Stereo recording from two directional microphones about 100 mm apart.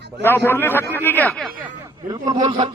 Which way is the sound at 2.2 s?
40° right (ahead or behind).